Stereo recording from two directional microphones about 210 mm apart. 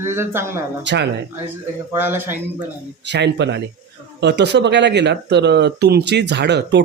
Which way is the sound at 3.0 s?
55° right (ahead or behind).